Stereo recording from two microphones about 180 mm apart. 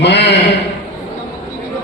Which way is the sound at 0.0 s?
70° left (ahead or behind).